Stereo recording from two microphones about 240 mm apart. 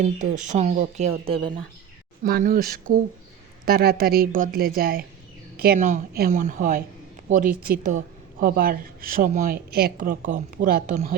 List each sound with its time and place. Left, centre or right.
0.0 s speech: right
2.2 s speech: right